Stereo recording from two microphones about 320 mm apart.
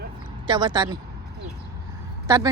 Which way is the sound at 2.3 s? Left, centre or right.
Centre.